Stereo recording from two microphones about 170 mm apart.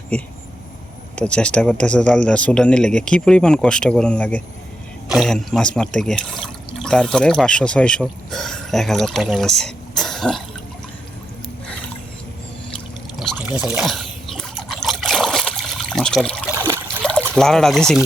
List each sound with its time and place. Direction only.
0.1 s speech: 5° left (ahead or behind)
13.3 s trickle: 10° right (ahead or behind)
16.5 s trickle: 15° right (ahead or behind)
17.0 s trickle: 5° left (ahead or behind)
17.3 s speech: 5° left (ahead or behind)